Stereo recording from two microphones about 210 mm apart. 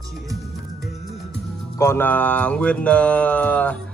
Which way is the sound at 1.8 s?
10° left (ahead or behind).